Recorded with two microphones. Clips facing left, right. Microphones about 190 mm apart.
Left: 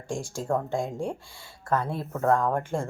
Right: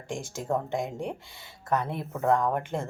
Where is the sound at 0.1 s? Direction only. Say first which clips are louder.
Left 2 dB; 20° right (ahead or behind).